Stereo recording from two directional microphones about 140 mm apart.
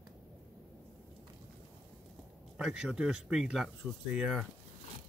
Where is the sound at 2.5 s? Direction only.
5° right (ahead or behind).